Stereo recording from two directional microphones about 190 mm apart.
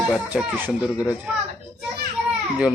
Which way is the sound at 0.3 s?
10° right (ahead or behind).